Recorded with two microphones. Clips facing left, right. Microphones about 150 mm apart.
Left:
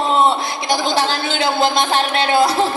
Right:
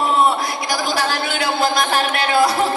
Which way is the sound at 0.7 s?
25° left (ahead or behind).